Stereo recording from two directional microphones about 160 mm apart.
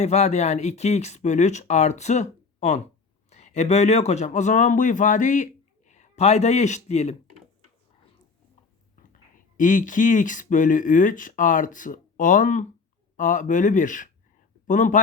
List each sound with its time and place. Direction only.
0.0 s speech: 45° left (ahead or behind)
9.6 s speech: 55° left (ahead or behind)